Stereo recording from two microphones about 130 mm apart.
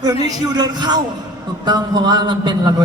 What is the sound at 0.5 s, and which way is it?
A woman's voice, 30° right (ahead or behind).